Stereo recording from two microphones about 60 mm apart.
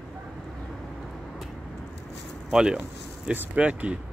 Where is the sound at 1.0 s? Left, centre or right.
Centre.